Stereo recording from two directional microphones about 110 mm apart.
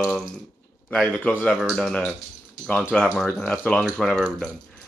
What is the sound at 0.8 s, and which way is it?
Speech, 15° left (ahead or behind).